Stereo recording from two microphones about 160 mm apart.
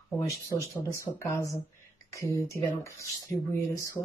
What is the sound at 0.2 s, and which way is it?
Speech, 20° left (ahead or behind).